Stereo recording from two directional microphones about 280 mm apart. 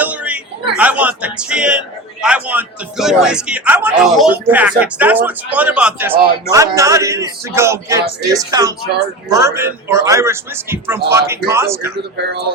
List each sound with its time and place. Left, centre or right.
0.0 s a sound: centre
0.8 s a man's voice: centre
12.1 s speech: right